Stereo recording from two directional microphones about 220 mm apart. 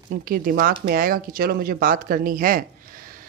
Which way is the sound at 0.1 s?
40° right (ahead or behind).